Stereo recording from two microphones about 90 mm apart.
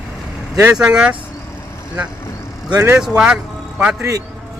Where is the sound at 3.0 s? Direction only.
10° right (ahead or behind).